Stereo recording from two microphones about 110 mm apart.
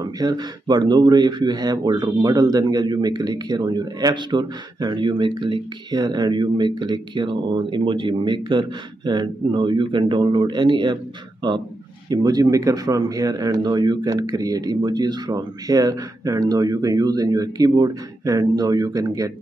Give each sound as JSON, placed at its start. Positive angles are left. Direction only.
{"t": 0.0, "sound": "speech", "side_deg": -35}
{"t": 12.1, "sound": "speech", "side_deg": -35}